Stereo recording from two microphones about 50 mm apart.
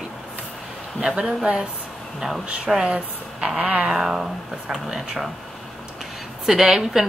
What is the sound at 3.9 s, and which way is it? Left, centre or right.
Speech, centre.